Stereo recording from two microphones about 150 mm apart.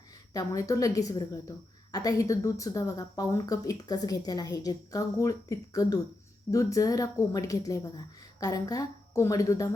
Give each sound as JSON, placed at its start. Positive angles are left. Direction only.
{"t": 0.3, "sound": "a woman's voice", "side_deg": 20}